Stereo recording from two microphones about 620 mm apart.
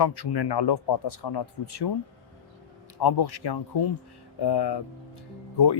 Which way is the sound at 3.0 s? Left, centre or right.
Left.